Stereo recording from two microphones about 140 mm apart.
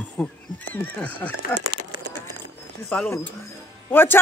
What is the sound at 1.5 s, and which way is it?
Speech, 15° left (ahead or behind).